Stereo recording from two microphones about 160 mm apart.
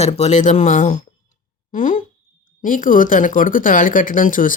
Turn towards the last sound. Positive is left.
turn(degrees=60)  # may be behind; listen again after turning